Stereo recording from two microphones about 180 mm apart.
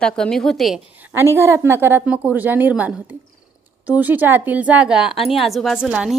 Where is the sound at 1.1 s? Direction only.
15° right (ahead or behind).